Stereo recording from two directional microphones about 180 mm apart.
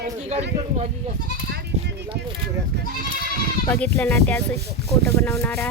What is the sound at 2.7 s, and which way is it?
Speech, 65° right (ahead or behind).